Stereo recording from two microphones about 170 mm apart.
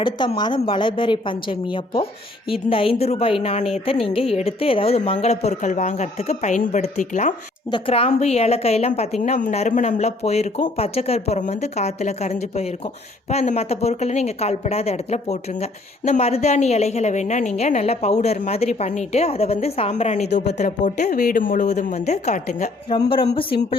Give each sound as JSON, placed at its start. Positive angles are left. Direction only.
{"t": 0.0, "sound": "a woman's voice", "side_deg": 25}
{"t": 7.7, "sound": "a woman's voice", "side_deg": 35}
{"t": 20.7, "sound": "speech", "side_deg": 55}
{"t": 22.9, "sound": "a woman's voice", "side_deg": 30}